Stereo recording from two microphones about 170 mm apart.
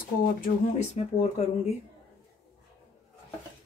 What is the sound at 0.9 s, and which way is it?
Speech, 40° left (ahead or behind).